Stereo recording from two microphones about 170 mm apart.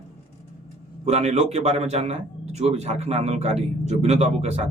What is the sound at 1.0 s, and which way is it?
A man's voice, 40° right (ahead or behind).